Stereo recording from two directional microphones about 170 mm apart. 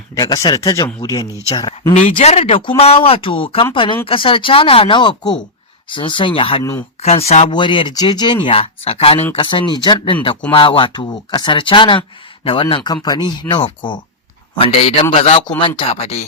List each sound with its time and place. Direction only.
0.1 s speech: 20° left (ahead or behind)
1.9 s speech: 45° left (ahead or behind)
6.6 s speech: 20° left (ahead or behind)
7.0 s speech: 40° left (ahead or behind)
7.5 s speech: 30° left (ahead or behind)